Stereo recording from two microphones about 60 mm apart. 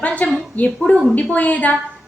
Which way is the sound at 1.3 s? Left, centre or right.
Left.